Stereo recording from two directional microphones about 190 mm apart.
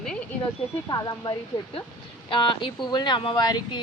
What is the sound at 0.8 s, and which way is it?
Speech, 20° left (ahead or behind).